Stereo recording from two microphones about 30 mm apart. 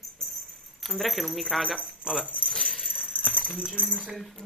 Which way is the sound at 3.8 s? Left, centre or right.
Left.